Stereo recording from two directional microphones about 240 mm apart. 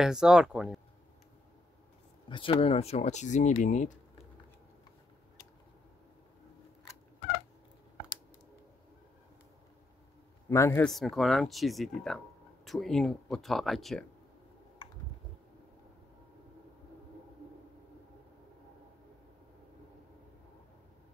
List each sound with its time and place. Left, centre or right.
0.0 s speech: centre
2.2 s speech: left
10.5 s speech: centre